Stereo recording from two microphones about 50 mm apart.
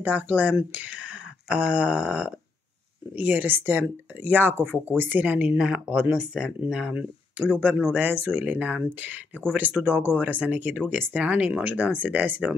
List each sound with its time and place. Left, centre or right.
0.0 s speech: right
0.7 s a sound: right
3.2 s speech: right
5.6 s speech: centre
7.0 s speech: right